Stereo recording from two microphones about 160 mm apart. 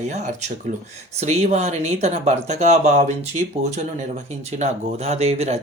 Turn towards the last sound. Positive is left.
turn(degrees=-40)  # may be behind; listen again after turning